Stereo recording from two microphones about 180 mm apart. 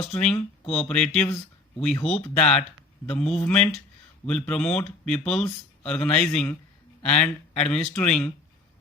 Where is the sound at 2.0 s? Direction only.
35° left (ahead or behind).